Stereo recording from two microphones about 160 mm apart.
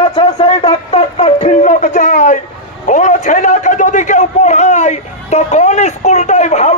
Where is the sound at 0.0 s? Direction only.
30° left (ahead or behind).